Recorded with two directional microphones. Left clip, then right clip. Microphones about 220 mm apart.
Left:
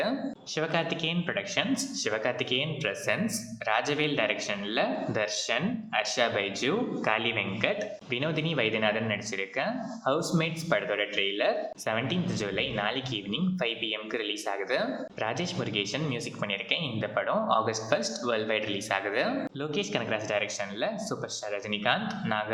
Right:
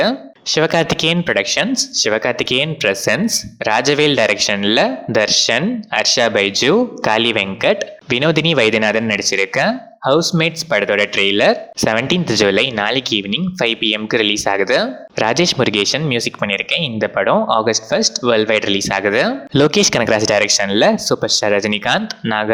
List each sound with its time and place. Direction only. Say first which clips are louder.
0.0 s speech: right 13 dB; 45° right (ahead or behind)